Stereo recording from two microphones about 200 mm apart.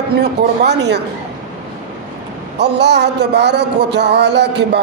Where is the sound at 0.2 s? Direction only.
55° right (ahead or behind).